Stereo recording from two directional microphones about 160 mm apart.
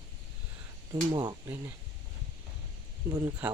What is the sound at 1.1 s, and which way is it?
Speech, 25° right (ahead or behind).